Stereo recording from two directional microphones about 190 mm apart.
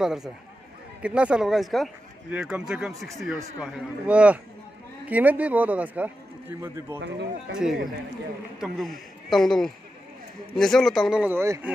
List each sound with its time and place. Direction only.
0.0 s a man's voice: centre (ahead or behind)
7.0 s speech: 65° right (ahead or behind)
8.5 s speech: centre (ahead or behind)